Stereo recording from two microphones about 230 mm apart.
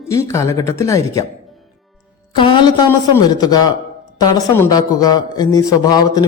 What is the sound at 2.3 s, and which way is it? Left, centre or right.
Speech, left.